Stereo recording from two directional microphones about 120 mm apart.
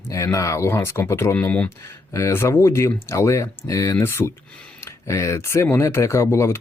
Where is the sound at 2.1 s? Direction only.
25° left (ahead or behind).